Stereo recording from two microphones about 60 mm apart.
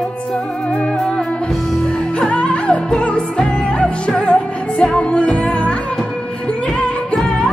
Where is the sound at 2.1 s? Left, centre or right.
Centre.